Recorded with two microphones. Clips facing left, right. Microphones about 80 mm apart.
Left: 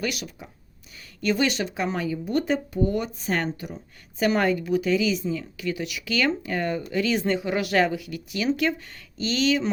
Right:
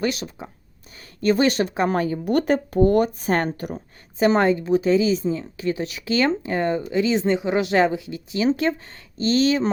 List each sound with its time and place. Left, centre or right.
0.0 s speech: right
4.2 s speech: right